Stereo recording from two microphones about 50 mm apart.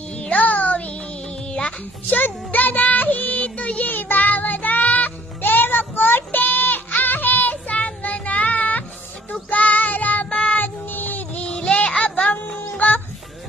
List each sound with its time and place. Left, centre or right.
0.2 s child singing: left
1.5 s music: left
2.1 s music: left
3.9 s child singing: left
10.2 s child singing: centre
10.6 s child singing: left
11.4 s music: centre